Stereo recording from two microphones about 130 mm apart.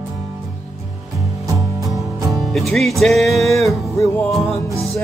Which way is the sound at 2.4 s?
Centre (ahead or behind).